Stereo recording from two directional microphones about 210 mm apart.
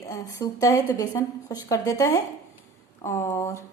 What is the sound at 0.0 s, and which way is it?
A woman's voice, 15° left (ahead or behind).